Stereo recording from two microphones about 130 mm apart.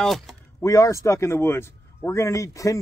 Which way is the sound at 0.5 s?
25° left (ahead or behind).